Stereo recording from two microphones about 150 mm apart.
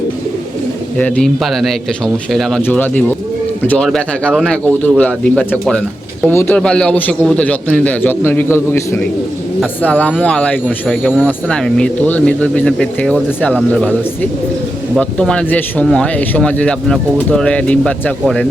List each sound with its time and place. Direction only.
0.9 s speech: 10° left (ahead or behind)